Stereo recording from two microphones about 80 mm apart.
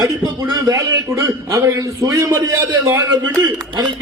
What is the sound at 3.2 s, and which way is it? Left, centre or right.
Speech, right.